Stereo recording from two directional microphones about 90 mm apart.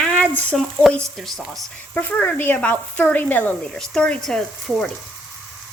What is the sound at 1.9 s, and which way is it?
Speech, 20° left (ahead or behind).